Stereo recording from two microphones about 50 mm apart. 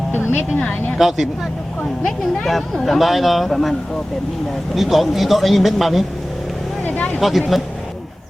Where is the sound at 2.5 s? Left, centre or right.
Centre.